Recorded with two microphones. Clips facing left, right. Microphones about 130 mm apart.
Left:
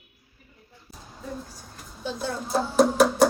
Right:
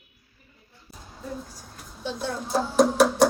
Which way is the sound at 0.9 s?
Centre (ahead or behind).